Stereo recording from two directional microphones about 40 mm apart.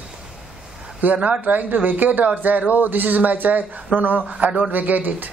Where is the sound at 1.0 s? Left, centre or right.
Right.